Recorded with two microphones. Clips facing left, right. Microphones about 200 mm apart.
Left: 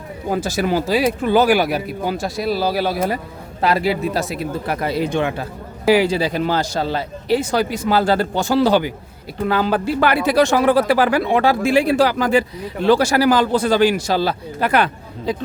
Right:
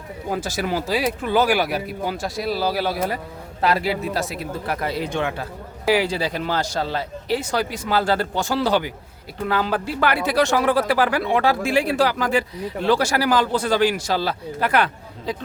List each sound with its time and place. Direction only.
0.6 s speech: 25° left (ahead or behind)